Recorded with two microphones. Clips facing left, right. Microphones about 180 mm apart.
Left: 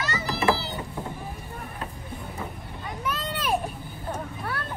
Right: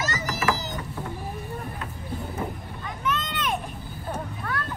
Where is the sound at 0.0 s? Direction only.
45° right (ahead or behind).